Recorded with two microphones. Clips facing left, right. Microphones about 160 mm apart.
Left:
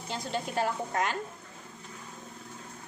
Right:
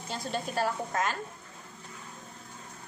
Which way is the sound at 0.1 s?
15° left (ahead or behind).